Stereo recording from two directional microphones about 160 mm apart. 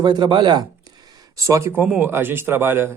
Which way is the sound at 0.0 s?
25° right (ahead or behind).